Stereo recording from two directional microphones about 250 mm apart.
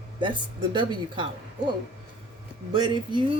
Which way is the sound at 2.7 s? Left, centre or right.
Centre.